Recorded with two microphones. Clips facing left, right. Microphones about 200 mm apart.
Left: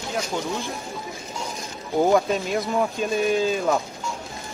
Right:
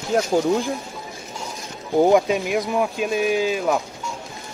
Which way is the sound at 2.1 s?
15° right (ahead or behind).